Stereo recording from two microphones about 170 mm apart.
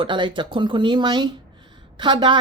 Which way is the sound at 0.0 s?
30° right (ahead or behind).